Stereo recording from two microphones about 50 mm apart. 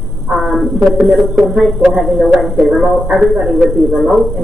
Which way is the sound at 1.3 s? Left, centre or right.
Centre.